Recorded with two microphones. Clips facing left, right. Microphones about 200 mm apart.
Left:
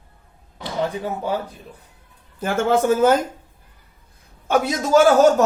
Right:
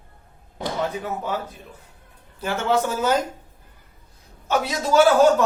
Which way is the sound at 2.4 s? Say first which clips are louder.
Left 4 dB; 50° left (ahead or behind).